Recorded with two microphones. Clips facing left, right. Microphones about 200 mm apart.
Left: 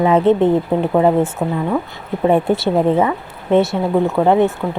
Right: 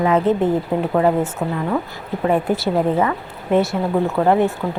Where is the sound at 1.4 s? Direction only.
15° left (ahead or behind).